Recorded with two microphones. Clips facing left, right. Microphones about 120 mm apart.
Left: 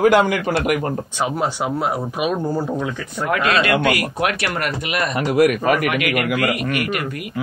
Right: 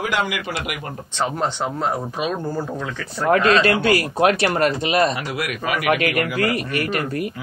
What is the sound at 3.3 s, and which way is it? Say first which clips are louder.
Speech: right 2 dB; 30° right (ahead or behind).